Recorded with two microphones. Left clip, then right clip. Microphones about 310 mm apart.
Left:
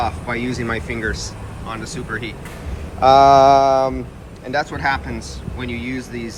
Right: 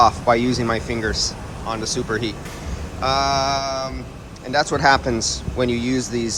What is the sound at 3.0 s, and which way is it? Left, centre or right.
Mantra, centre.